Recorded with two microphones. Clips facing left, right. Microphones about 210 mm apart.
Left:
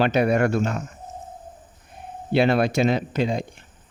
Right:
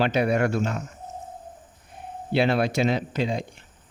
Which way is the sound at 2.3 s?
50° left (ahead or behind).